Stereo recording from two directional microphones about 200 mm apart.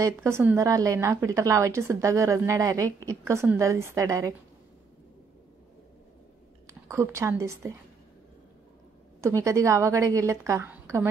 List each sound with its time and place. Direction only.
0.0 s a woman's voice: 15° right (ahead or behind)
6.7 s a woman's voice: 15° right (ahead or behind)
9.2 s a woman's voice: 15° right (ahead or behind)